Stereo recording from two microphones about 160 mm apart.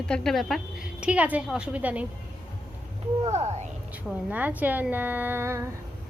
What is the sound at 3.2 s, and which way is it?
Speech, 45° right (ahead or behind).